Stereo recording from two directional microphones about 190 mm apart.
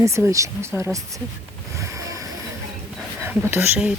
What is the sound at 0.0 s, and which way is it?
Speech, 15° right (ahead or behind).